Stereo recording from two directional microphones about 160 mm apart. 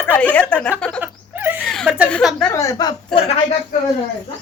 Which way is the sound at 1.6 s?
Centre (ahead or behind).